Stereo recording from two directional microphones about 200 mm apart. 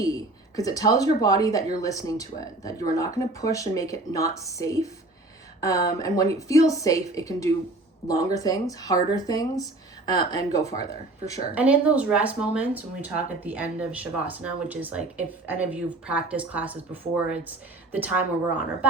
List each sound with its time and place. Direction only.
0.0 s speech: 15° left (ahead or behind)
11.5 s speech: 5° right (ahead or behind)